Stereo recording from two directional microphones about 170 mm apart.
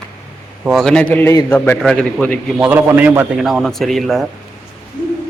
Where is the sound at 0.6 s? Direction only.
Centre (ahead or behind).